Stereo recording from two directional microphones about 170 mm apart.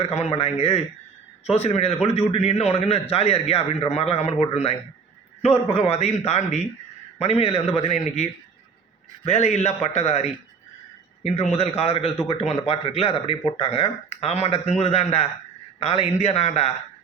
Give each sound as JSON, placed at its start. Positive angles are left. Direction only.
{"t": 0.0, "sound": "a man's voice", "side_deg": 35}